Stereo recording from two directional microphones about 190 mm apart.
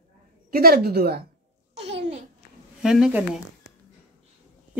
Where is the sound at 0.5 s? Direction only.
50° right (ahead or behind).